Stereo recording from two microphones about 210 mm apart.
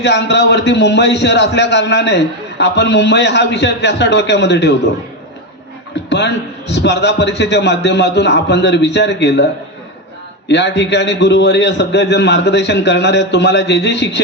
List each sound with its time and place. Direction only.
0.0 s a man's voice: 55° left (ahead or behind)
6.1 s a man's voice: 55° left (ahead or behind)
10.5 s a man's voice: 55° left (ahead or behind)